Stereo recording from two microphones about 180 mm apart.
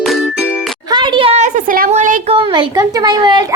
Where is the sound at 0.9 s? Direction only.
25° right (ahead or behind); by 2.4 s 40° right (ahead or behind).